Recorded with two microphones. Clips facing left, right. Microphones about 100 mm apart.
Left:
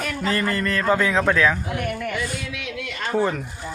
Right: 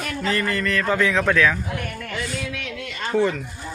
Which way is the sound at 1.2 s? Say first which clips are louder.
Even; 20° left (ahead or behind).